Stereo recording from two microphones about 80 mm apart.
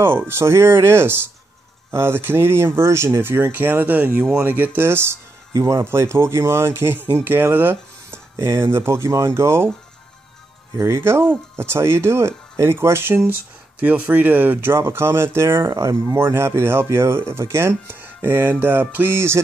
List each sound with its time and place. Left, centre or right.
0.3 s speech: right
5.5 s speech: right
10.8 s speech: right